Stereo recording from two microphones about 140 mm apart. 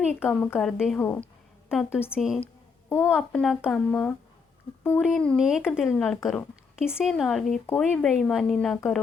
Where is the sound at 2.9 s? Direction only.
15° left (ahead or behind).